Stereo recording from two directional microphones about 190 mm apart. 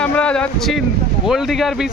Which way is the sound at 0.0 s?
5° left (ahead or behind).